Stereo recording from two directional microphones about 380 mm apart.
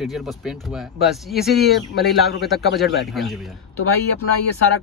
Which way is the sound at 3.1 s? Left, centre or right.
Centre.